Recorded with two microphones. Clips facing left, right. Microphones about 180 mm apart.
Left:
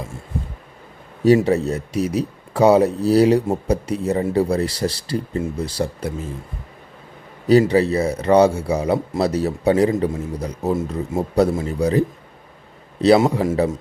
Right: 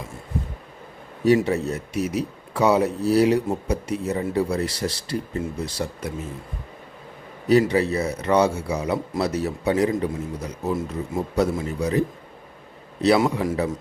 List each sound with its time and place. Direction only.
1.2 s speech: 35° left (ahead or behind)
7.4 s a man's voice: 35° left (ahead or behind)